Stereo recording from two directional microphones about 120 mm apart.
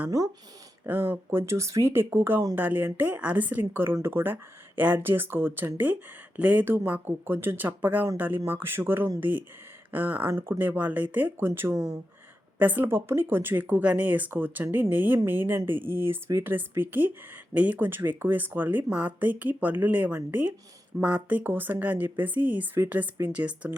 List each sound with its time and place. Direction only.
0.9 s speech: 15° right (ahead or behind)